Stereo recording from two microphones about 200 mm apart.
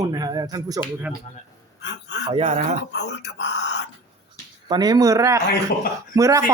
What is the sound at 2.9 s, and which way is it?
Speech, 60° left (ahead or behind).